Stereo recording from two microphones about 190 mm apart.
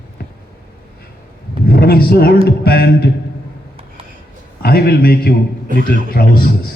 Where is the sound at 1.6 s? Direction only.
55° left (ahead or behind).